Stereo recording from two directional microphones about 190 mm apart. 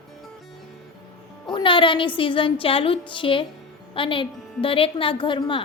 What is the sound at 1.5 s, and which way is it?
A woman's voice, 25° left (ahead or behind).